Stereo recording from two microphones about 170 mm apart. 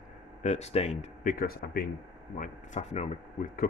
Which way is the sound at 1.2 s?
60° left (ahead or behind).